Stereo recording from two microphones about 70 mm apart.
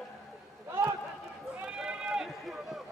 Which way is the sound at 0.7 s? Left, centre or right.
Right.